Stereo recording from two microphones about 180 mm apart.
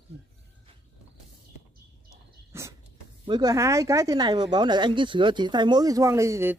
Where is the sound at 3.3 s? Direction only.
20° right (ahead or behind).